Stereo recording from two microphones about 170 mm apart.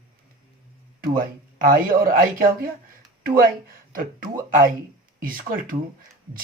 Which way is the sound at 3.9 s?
55° right (ahead or behind).